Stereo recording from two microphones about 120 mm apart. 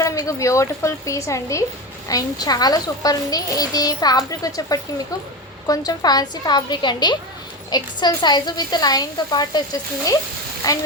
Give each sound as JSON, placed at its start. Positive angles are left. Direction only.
{"t": 0.0, "sound": "a woman's voice", "side_deg": 25}
{"t": 10.6, "sound": "a child's voice", "side_deg": 30}